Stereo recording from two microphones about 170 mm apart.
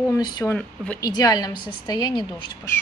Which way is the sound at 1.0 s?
25° left (ahead or behind).